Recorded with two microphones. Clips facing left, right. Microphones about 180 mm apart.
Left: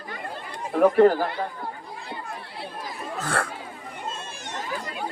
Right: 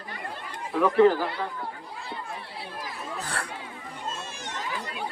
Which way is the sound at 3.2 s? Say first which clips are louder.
Left 7 dB; 50° left (ahead or behind).